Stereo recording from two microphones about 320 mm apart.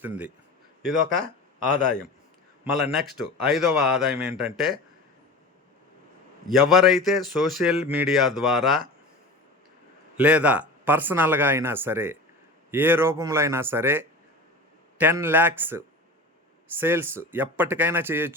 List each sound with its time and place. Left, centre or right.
2.7 s speech: centre
6.5 s speech: centre
10.2 s speech: centre